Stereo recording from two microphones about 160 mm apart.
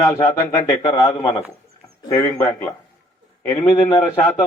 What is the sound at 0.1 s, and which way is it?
A man's voice, 25° left (ahead or behind).